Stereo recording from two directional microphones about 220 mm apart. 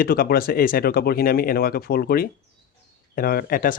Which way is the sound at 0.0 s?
45° left (ahead or behind).